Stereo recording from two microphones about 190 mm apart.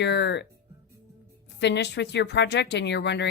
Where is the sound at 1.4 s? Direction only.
65° left (ahead or behind).